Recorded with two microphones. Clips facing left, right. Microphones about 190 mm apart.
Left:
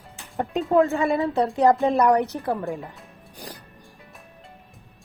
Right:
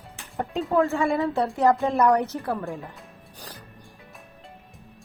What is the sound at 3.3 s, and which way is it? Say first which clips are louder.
Music: left 5 dB; 15° left (ahead or behind).